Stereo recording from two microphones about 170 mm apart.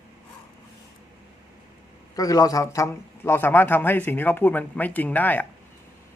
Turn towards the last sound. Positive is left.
turn(degrees=10)  # may be behind; listen again after turning